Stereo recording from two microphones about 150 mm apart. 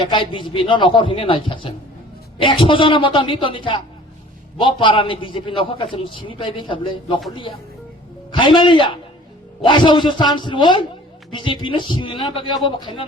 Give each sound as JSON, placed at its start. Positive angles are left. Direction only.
{"t": 0.0, "sound": "a man's voice", "side_deg": 30}
{"t": 8.3, "sound": "a man's voice", "side_deg": 30}